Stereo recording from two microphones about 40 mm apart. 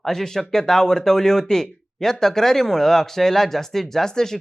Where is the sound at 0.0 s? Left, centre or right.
Centre.